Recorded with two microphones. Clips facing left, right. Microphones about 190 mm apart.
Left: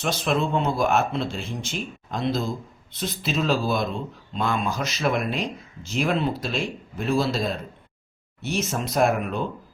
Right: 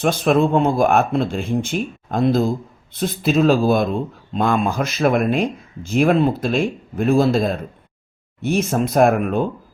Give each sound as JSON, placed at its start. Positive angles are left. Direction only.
{"t": 0.0, "sound": "speech", "side_deg": -55}